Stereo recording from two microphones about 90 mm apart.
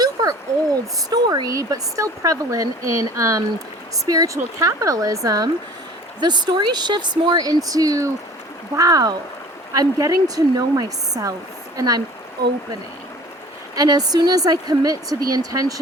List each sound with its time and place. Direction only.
0.0 s a sound: 40° right (ahead or behind)
1.1 s speech: 45° right (ahead or behind)
6.1 s a woman's voice: 55° right (ahead or behind)
13.7 s a woman's voice: 50° right (ahead or behind)